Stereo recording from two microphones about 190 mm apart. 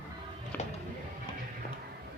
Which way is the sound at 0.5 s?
10° left (ahead or behind).